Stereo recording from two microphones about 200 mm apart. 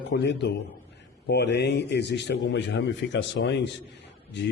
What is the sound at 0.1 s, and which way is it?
A man's voice, 60° left (ahead or behind).